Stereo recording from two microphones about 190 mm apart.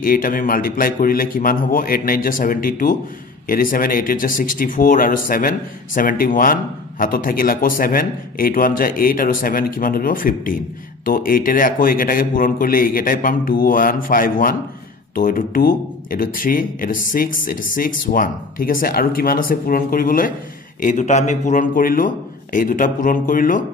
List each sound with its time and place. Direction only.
0.0 s speech: 45° left (ahead or behind)